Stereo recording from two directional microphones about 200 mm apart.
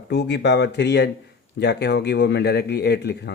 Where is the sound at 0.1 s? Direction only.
60° left (ahead or behind).